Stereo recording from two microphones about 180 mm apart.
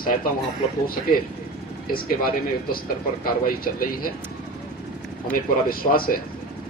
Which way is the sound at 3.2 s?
55° left (ahead or behind).